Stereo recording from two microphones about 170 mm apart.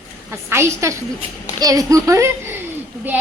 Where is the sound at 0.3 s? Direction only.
15° right (ahead or behind).